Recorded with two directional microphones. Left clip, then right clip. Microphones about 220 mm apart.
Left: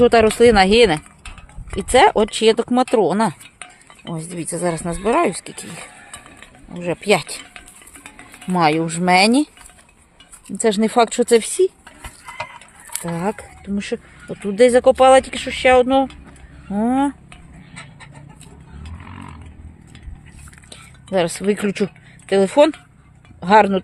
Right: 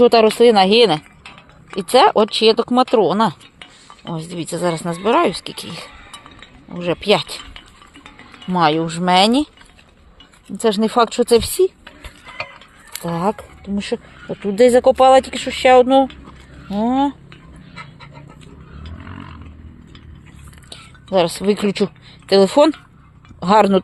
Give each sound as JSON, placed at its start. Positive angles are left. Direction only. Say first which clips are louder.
{"t": 0.0, "sound": "speech", "louder": "right 1 dB", "side_deg": 10}
{"t": 8.5, "sound": "speech", "louder": "right 1 dB", "side_deg": 15}
{"t": 10.6, "sound": "speech", "louder": "even", "side_deg": 10}
{"t": 13.0, "sound": "speech", "louder": "right 4 dB", "side_deg": 0}
{"t": 18.8, "sound": "vehicle", "louder": "right 2 dB", "side_deg": 55}
{"t": 20.7, "sound": "speech", "louder": "right 3 dB", "side_deg": 5}